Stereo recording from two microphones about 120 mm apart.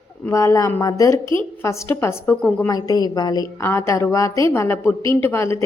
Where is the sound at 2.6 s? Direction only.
30° left (ahead or behind).